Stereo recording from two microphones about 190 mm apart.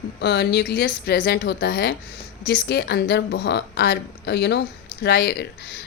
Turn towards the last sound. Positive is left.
turn(degrees=60)  # may be behind; listen again after turning